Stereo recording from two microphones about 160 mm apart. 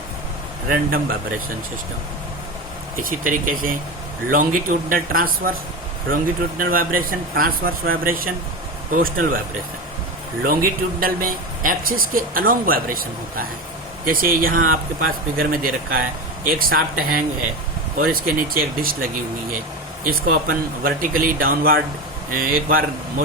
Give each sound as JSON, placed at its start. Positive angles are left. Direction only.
{"t": 0.7, "sound": "a man's voice", "side_deg": -65}
{"t": 3.0, "sound": "a man's voice", "side_deg": -60}
{"t": 6.6, "sound": "a man's voice", "side_deg": -65}
{"t": 10.4, "sound": "a man's voice", "side_deg": -65}
{"t": 20.1, "sound": "a man's voice", "side_deg": -65}